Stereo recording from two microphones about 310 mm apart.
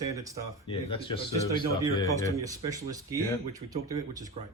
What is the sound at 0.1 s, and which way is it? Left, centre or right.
Speech, centre.